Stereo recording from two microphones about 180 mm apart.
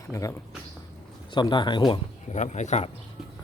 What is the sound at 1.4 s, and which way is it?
Speech, 25° left (ahead or behind).